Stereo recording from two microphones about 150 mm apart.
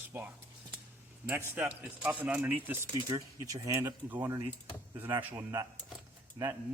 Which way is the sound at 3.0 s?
25° right (ahead or behind).